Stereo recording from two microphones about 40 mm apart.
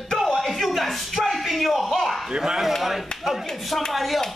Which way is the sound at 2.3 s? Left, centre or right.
Centre.